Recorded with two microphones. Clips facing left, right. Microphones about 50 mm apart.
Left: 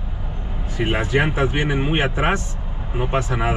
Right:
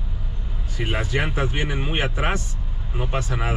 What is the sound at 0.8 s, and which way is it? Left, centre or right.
Speech, left.